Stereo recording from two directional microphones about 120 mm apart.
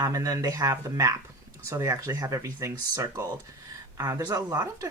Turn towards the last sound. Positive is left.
turn(degrees=-30)  # may be behind; listen again after turning